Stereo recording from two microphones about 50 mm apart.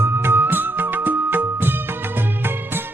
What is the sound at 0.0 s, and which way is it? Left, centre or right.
Music, right.